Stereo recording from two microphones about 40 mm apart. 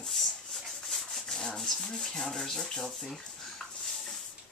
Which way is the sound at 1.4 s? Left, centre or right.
Centre.